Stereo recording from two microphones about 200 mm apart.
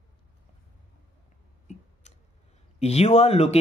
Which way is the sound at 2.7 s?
30° left (ahead or behind).